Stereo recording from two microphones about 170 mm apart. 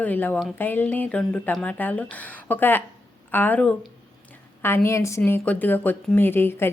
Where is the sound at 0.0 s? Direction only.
10° left (ahead or behind).